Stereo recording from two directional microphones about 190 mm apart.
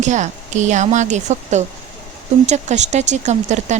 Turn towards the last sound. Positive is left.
turn(degrees=-40)  # may be behind; listen again after turning